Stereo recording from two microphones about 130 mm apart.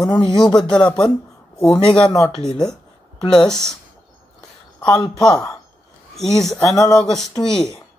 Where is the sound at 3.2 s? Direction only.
35° left (ahead or behind).